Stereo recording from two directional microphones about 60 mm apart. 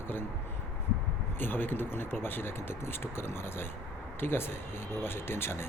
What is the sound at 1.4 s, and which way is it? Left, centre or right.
Speech, left.